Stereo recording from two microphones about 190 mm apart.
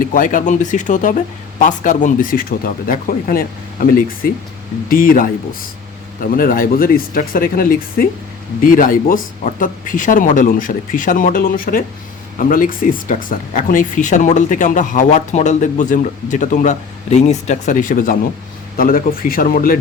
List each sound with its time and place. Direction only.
0.0 s speech: 45° left (ahead or behind)
6.3 s speech: 50° left (ahead or behind)